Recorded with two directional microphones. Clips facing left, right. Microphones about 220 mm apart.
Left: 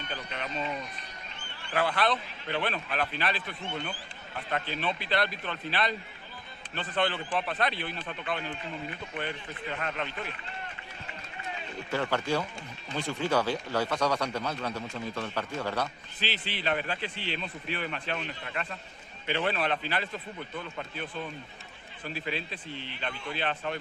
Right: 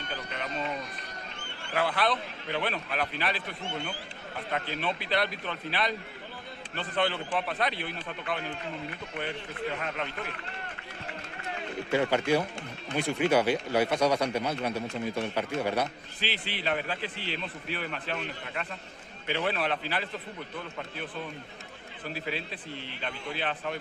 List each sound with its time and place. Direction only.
1.7 s speech: 10° right (ahead or behind)
4.8 s speech: 10° right (ahead or behind)
11.9 s a man's voice: 15° right (ahead or behind)
22.2 s a man's voice: 5° right (ahead or behind)